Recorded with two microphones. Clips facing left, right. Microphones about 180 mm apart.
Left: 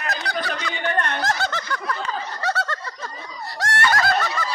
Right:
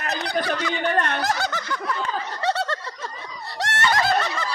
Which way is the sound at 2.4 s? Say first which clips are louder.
Right 2 dB; 25° right (ahead or behind).